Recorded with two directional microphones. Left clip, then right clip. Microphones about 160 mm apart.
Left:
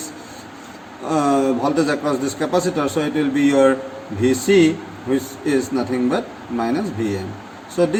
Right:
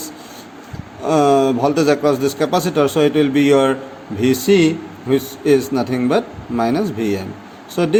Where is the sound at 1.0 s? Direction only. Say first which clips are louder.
Right 4 dB; 55° right (ahead or behind).